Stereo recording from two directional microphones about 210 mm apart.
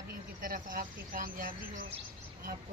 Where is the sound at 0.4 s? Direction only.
40° right (ahead or behind).